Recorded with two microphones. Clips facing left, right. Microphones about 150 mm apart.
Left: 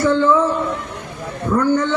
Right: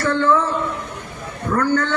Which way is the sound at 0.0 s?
15° left (ahead or behind).